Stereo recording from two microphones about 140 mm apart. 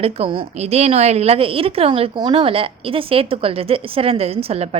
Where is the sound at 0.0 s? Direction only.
40° right (ahead or behind).